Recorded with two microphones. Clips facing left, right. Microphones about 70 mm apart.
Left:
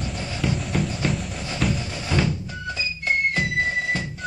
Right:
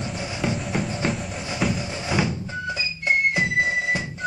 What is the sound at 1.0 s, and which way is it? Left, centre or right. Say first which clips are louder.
Train: even; centre.